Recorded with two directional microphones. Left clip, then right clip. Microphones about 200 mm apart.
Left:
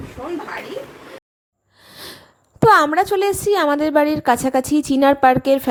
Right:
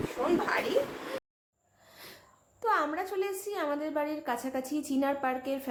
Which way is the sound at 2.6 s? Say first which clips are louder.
Left 17 dB; 55° left (ahead or behind).